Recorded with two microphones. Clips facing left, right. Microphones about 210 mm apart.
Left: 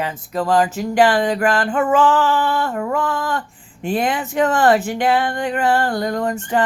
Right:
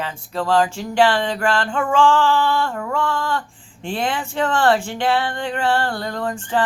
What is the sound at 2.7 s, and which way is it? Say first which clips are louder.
Speech: left 4 dB; 20° left (ahead or behind).